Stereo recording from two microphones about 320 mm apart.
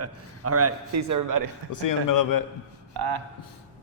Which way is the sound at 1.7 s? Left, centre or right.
Left.